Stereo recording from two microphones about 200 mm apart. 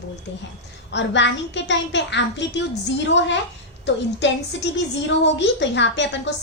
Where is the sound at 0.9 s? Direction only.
65° left (ahead or behind).